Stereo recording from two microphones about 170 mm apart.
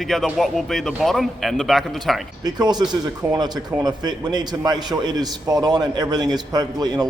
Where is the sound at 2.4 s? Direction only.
25° right (ahead or behind).